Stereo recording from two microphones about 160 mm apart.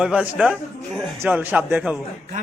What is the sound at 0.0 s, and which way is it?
A man's voice, 5° right (ahead or behind).